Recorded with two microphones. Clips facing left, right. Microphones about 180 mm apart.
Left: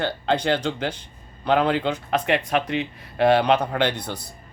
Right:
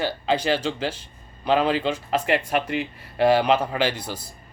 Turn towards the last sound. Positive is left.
turn(degrees=-10)  # may be behind; listen again after turning